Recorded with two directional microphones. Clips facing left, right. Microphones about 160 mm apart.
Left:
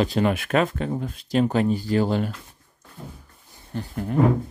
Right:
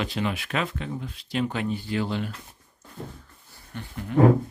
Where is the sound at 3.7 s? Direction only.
40° left (ahead or behind).